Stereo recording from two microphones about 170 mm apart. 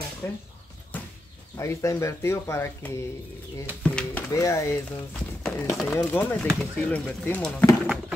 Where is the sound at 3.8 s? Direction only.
5° left (ahead or behind).